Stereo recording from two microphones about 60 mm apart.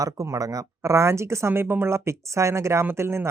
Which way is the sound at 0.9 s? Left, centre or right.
Right.